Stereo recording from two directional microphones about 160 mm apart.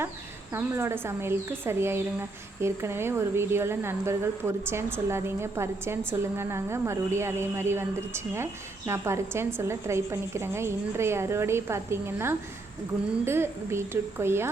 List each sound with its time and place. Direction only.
0.5 s a woman's voice: 15° right (ahead or behind)